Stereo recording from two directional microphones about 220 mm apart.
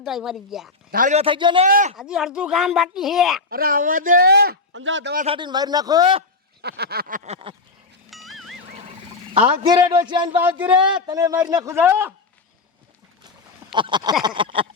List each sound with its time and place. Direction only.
0.0 s speech: centre (ahead or behind)
0.9 s a man's voice: 35° right (ahead or behind); by 1.6 s 20° right (ahead or behind)
1.6 s speech: 35° right (ahead or behind)
2.0 s speech: 5° right (ahead or behind)
3.5 s speech: 40° right (ahead or behind); by 5.1 s 55° right (ahead or behind)
5.1 s a man's voice: 25° right (ahead or behind)
6.6 s speech: 45° right (ahead or behind); by 7.5 s 25° right (ahead or behind)
8.1 s music: centre (ahead or behind)
9.3 s a man's voice: 20° right (ahead or behind)
10.3 s speech: 10° right (ahead or behind)
13.7 s a man's voice: 20° right (ahead or behind)